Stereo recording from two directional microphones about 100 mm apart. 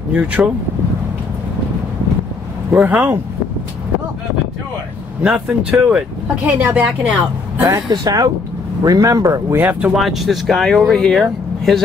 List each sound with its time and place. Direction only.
0.1 s speech: 15° right (ahead or behind)
2.7 s speech: 15° right (ahead or behind)
5.2 s speech: 10° right (ahead or behind)
8.0 s speech: 40° right (ahead or behind)
9.6 s speech: 15° right (ahead or behind)
9.9 s speech: centre (ahead or behind)